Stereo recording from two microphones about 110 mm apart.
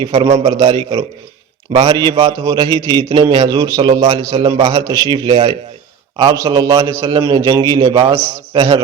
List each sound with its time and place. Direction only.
0.1 s a man's voice: 50° right (ahead or behind); by 2.6 s 35° right (ahead or behind)
2.7 s a man's voice: 45° right (ahead or behind)
5.1 s a man's voice: 50° right (ahead or behind)
6.3 s a man's voice: 35° right (ahead or behind)